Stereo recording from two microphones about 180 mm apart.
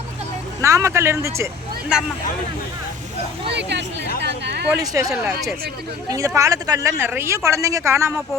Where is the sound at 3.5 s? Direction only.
75° right (ahead or behind).